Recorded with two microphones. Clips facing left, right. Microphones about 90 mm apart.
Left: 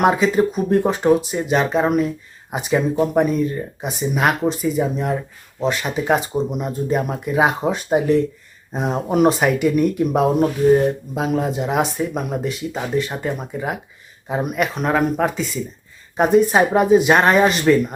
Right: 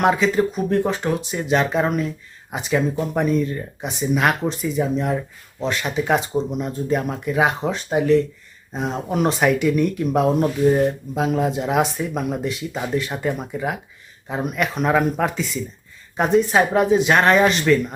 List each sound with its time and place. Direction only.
0.0 s speech: 10° left (ahead or behind)
17.7 s speech: 25° left (ahead or behind)